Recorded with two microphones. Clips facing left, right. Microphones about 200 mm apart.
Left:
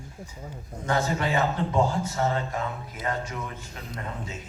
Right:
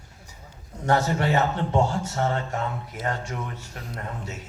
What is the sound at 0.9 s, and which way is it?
Speech, 70° right (ahead or behind).